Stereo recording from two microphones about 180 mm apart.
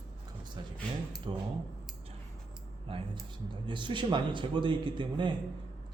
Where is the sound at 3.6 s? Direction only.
25° right (ahead or behind).